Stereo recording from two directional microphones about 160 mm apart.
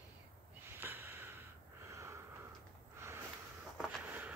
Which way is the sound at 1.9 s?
20° right (ahead or behind).